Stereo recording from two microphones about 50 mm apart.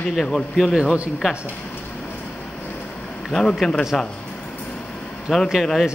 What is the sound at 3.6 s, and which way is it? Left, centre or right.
Speech, centre.